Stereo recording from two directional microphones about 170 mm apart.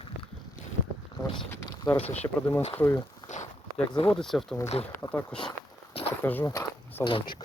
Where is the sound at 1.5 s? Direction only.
15° left (ahead or behind).